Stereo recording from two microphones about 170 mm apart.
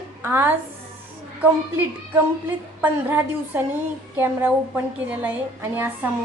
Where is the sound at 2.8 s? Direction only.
10° right (ahead or behind).